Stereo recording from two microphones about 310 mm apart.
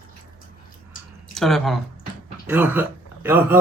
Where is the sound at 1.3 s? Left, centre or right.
Centre.